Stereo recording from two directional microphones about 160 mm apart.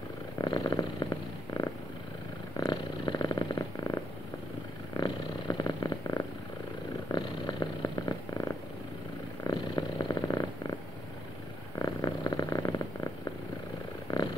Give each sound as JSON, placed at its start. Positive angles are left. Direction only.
{"t": 0.4, "sound": "purr", "side_deg": 25}
{"t": 2.5, "sound": "purr", "side_deg": 25}
{"t": 11.8, "sound": "purr", "side_deg": 25}